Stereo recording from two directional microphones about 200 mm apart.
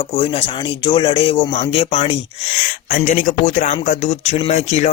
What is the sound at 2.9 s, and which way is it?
Speech, 40° left (ahead or behind).